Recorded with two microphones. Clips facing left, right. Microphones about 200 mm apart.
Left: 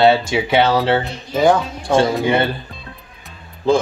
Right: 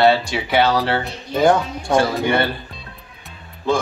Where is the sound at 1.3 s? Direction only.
5° left (ahead or behind).